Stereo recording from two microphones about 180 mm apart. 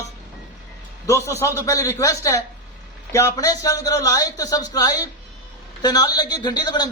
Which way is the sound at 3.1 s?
15° left (ahead or behind).